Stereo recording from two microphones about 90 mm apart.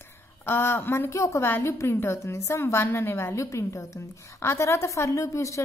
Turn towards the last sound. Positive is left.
turn(degrees=35)  # may be behind; listen again after turning